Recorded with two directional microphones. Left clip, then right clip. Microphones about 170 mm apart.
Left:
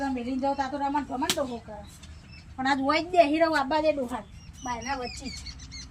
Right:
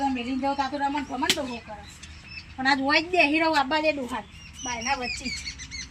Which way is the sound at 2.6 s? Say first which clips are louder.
Right 3 dB; 15° left (ahead or behind).